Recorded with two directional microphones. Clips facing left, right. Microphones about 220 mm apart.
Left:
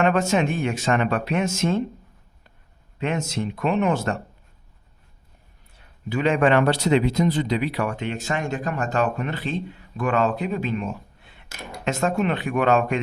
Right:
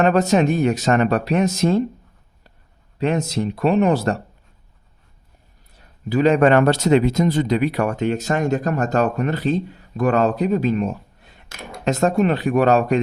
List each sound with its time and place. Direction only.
0.0 s speech: 35° right (ahead or behind)
3.0 s speech: 35° right (ahead or behind)
5.7 s speech: 35° right (ahead or behind)